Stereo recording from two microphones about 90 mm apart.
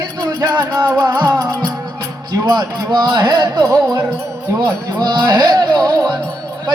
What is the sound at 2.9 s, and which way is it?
Music, 50° right (ahead or behind).